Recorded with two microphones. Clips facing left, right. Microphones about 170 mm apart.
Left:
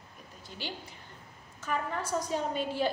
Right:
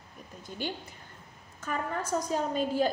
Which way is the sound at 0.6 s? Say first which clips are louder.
Right 5 dB; 50° right (ahead or behind).